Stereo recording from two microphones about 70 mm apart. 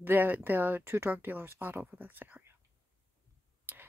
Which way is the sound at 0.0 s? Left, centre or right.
Right.